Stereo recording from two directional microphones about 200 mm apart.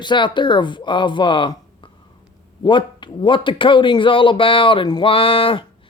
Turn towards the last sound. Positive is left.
turn(degrees=25)  # may be behind; listen again after turning